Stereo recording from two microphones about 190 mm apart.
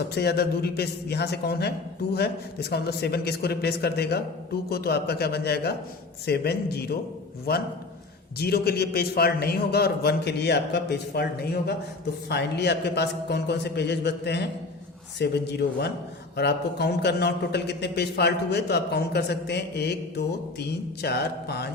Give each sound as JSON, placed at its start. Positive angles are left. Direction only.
{"t": 0.1, "sound": "a man's voice", "side_deg": 60}